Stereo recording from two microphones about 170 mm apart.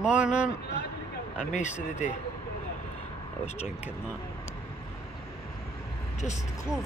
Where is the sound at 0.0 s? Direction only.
5° right (ahead or behind).